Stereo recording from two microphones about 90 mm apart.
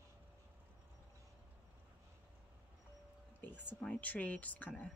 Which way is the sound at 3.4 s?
15° left (ahead or behind).